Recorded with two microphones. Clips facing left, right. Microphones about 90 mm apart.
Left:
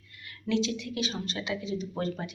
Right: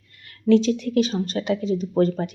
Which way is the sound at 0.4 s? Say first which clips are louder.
Right 11 dB; 45° right (ahead or behind).